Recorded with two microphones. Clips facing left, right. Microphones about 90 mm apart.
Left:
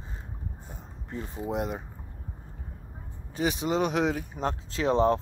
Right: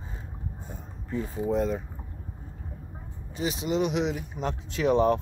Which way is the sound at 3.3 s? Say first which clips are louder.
Left 1 dB; 45° left (ahead or behind).